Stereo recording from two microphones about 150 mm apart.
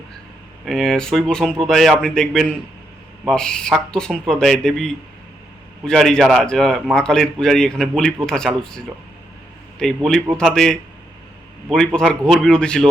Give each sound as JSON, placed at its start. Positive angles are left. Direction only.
{"t": 0.6, "sound": "speech", "side_deg": 0}
{"t": 11.9, "sound": "speech", "side_deg": 5}